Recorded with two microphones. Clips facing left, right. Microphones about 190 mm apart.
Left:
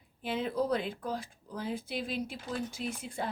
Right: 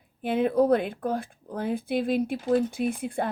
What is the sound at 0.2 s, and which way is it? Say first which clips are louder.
Speech: right 9 dB; 55° right (ahead or behind).